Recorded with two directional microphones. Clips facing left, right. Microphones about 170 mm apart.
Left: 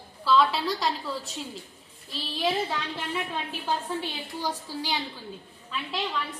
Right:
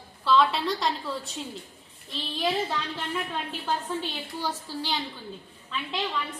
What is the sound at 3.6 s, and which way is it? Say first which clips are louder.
A woman's voice: even; 10° left (ahead or behind).